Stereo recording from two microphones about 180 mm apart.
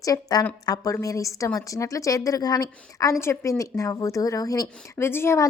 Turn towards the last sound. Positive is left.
turn(degrees=15)  # may be behind; listen again after turning